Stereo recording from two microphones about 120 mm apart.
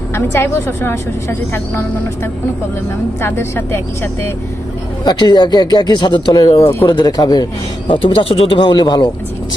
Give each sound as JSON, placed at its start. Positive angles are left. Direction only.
{"t": 0.1, "sound": "a woman's voice", "side_deg": 20}
{"t": 3.2, "sound": "a woman's voice", "side_deg": 20}
{"t": 5.0, "sound": "speech", "side_deg": 35}
{"t": 7.9, "sound": "speech", "side_deg": 50}